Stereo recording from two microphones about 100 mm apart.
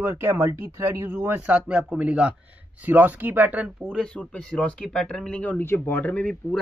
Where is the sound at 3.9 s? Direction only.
10° left (ahead or behind).